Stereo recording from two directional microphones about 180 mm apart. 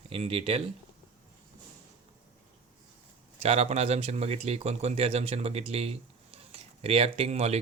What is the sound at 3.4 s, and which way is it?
Speech, 35° right (ahead or behind).